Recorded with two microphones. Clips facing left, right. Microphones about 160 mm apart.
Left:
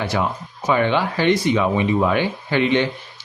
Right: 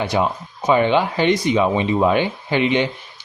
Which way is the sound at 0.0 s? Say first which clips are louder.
Right 2 dB; 20° right (ahead or behind).